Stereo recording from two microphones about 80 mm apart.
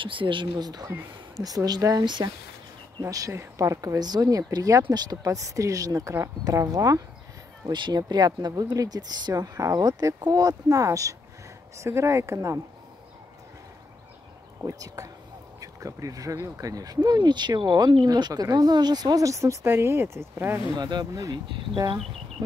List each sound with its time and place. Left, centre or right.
0.0 s speech: right
0.6 s speech: right
4.8 s speech: right
5.2 s speech: right
7.7 s speech: right
15.0 s speech: right
20.7 s speech: right